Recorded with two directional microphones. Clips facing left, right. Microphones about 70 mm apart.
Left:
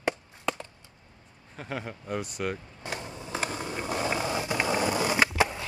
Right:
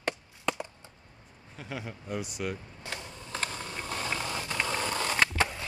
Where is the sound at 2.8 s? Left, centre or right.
Centre.